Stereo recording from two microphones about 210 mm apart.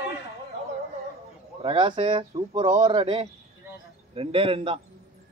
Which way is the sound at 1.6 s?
25° right (ahead or behind).